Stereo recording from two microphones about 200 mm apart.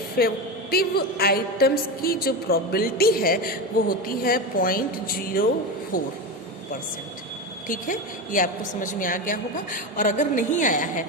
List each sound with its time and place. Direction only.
0.2 s a woman's voice: 50° left (ahead or behind)
7.7 s a woman's voice: 40° left (ahead or behind)